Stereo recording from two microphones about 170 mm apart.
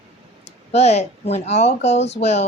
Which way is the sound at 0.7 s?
40° left (ahead or behind).